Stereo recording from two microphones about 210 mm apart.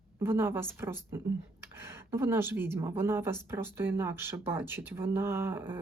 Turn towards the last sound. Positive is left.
turn(degrees=-10)  # may be behind; listen again after turning